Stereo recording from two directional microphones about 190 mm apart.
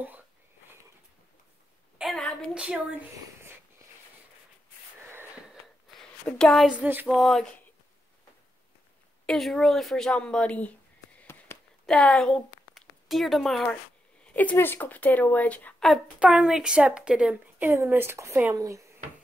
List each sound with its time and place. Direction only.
2.0 s a woman's voice: centre (ahead or behind)
5.9 s a woman's voice: 5° left (ahead or behind)
9.2 s a woman's voice: centre (ahead or behind)
11.5 s a sound: 15° left (ahead or behind)
11.8 s a woman's voice: 5° left (ahead or behind); by 18.9 s 15° right (ahead or behind)